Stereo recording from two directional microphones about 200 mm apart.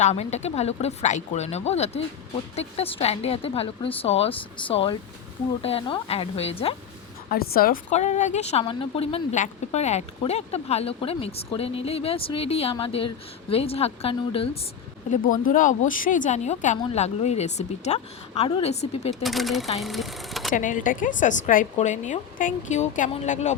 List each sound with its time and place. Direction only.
0.0 s speech: 35° left (ahead or behind)
7.3 s speech: 50° left (ahead or behind); by 14.6 s 25° left (ahead or behind)
15.1 s speech: 40° left (ahead or behind)
19.2 s speech: centre (ahead or behind)
20.5 s speech: 40° left (ahead or behind)